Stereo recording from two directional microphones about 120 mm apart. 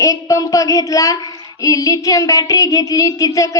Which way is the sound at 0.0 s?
30° left (ahead or behind).